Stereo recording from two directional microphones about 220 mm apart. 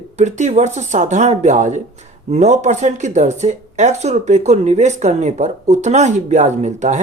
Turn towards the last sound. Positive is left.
turn(degrees=-30)  # may be behind; listen again after turning